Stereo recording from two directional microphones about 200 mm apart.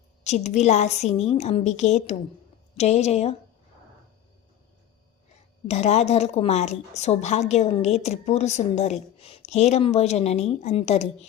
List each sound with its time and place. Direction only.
0.3 s a woman's voice: 35° left (ahead or behind)
5.6 s a woman's voice: 35° left (ahead or behind)